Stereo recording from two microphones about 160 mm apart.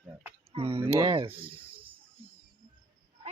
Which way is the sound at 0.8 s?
15° right (ahead or behind).